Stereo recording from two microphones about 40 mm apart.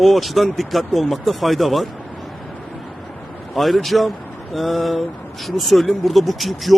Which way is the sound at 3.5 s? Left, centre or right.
Centre.